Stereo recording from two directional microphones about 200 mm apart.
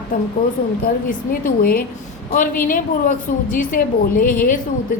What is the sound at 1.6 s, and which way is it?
A woman's voice, 45° left (ahead or behind).